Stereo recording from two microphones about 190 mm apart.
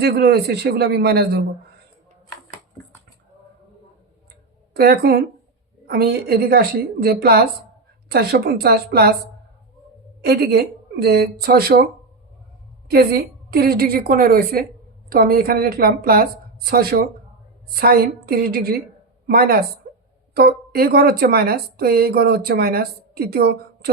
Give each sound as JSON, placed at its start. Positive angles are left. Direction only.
{"t": 0.0, "sound": "speech", "side_deg": -55}
{"t": 4.7, "sound": "a woman's voice", "side_deg": -55}
{"t": 10.2, "sound": "speech", "side_deg": -55}
{"t": 12.9, "sound": "a woman's voice", "side_deg": -55}